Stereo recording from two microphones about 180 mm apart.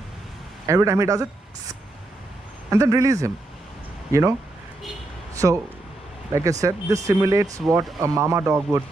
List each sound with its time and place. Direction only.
0.7 s speech: 15° right (ahead or behind)
2.7 s speech: 20° right (ahead or behind)
5.3 s a sound: 15° right (ahead or behind)
6.6 s speech: 15° right (ahead or behind)